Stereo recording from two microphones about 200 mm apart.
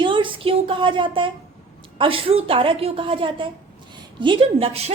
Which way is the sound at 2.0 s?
25° right (ahead or behind).